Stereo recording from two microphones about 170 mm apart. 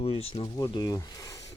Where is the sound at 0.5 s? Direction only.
25° left (ahead or behind).